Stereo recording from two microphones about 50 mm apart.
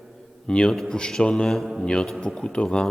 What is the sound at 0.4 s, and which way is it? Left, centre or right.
Speech, centre.